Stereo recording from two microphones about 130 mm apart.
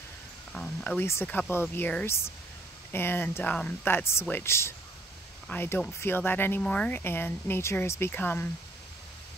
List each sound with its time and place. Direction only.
0.5 s speech: 5° left (ahead or behind)